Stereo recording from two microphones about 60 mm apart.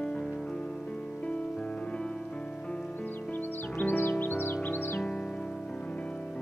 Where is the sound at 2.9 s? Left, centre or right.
Left.